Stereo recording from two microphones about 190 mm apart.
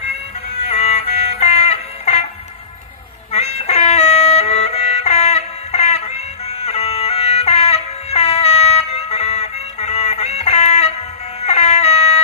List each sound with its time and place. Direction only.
0.7 s music: 35° left (ahead or behind)
3.3 s music: 35° left (ahead or behind)